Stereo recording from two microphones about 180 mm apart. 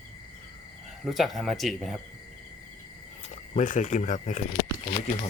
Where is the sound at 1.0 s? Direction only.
Centre (ahead or behind).